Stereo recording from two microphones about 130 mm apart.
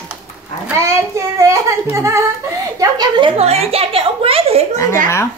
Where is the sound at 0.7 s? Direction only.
20° right (ahead or behind).